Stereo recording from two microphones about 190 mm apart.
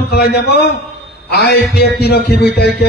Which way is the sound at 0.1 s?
60° left (ahead or behind).